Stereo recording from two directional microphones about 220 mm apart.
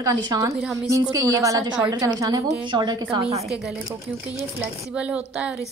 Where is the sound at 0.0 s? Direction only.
15° right (ahead or behind).